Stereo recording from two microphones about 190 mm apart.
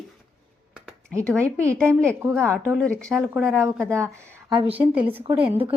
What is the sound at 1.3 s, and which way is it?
Speech, 15° right (ahead or behind).